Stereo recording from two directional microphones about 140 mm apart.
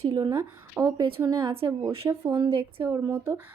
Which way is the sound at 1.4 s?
40° right (ahead or behind).